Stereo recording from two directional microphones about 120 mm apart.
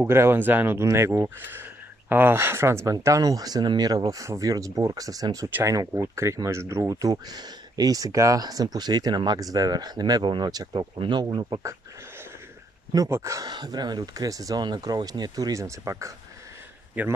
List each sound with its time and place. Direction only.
0.0 s speech: 20° right (ahead or behind)
12.9 s speech: 25° right (ahead or behind)
13.5 s speech: 35° right (ahead or behind)
17.0 s speech: 15° right (ahead or behind)